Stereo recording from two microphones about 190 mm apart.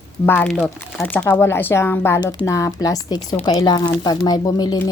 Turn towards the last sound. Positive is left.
turn(degrees=20)  # may be behind; listen again after turning